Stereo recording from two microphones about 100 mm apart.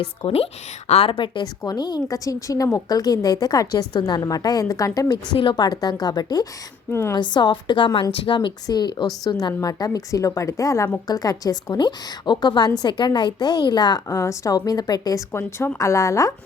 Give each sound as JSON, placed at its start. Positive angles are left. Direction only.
{"t": 0.0, "sound": "a woman's voice", "side_deg": 65}
{"t": 0.9, "sound": "a woman's voice", "side_deg": 80}
{"t": 5.4, "sound": "a woman's voice", "side_deg": 50}
{"t": 6.9, "sound": "a woman's voice", "side_deg": 25}
{"t": 7.2, "sound": "a woman's voice", "side_deg": 50}
{"t": 8.1, "sound": "a woman's voice", "side_deg": 65}
{"t": 8.4, "sound": "a woman's voice", "side_deg": 45}
{"t": 14.1, "sound": "a woman's voice", "side_deg": 30}
{"t": 15.3, "sound": "a woman's voice", "side_deg": 25}